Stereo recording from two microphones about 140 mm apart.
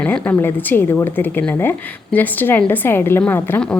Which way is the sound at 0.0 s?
10° left (ahead or behind).